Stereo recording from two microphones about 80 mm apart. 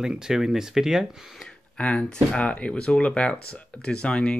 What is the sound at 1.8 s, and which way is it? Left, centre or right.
Speech, centre.